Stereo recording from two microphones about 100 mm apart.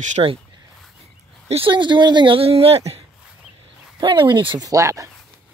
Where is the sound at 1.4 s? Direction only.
80° right.